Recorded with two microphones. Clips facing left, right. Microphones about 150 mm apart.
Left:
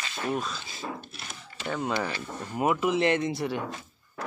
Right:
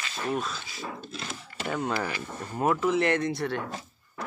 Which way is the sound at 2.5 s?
10° left (ahead or behind).